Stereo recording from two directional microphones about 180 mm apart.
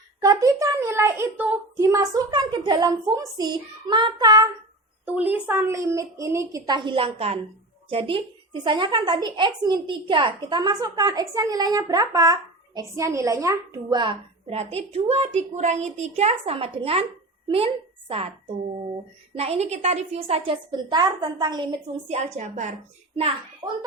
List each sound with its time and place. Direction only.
0.2 s a woman's voice: 20° right (ahead or behind)
5.0 s a woman's voice: 10° right (ahead or behind); by 17.1 s 30° right (ahead or behind)
19.3 s a woman's voice: 35° right (ahead or behind)
22.1 s a woman's voice: 40° right (ahead or behind)